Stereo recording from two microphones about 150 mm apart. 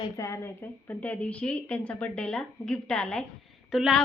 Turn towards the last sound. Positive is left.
turn(degrees=0)  # may be behind; listen again after turning